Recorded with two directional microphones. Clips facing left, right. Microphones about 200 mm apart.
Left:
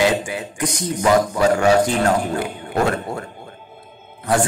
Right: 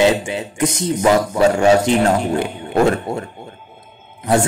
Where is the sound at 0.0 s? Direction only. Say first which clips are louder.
Right 3 dB; 25° right (ahead or behind).